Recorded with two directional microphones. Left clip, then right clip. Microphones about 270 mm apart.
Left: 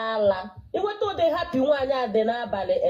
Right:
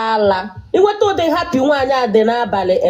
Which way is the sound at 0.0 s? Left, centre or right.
Right.